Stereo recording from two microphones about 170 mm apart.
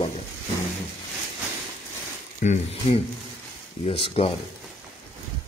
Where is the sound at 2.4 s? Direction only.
40° left (ahead or behind).